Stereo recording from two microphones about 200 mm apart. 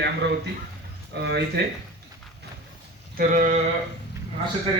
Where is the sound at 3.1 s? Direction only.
40° right (ahead or behind).